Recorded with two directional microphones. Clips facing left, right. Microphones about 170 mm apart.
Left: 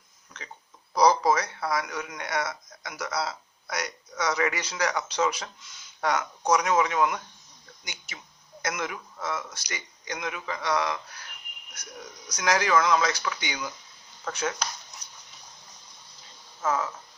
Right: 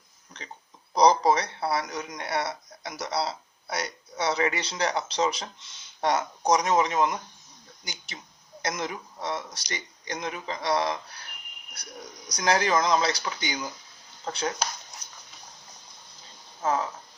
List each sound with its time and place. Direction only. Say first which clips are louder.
0.9 s a man's voice: right 1 dB; 30° right (ahead or behind)
12.3 s a man's voice: even; 35° right (ahead or behind)